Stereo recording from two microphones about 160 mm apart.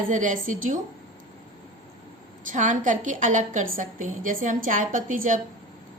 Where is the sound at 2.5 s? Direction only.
55° right (ahead or behind).